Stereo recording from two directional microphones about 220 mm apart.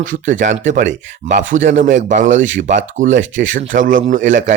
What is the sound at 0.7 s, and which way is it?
Speech, 55° right (ahead or behind).